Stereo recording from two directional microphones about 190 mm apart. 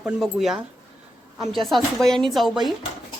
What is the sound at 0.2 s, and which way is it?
Speech, centre (ahead or behind).